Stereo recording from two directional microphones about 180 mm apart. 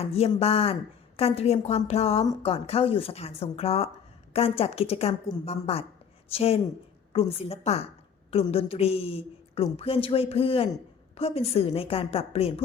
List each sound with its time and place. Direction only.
0.3 s a woman's voice: 35° left (ahead or behind)